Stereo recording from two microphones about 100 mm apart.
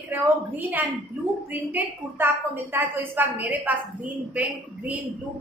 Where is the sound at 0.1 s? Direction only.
20° right (ahead or behind).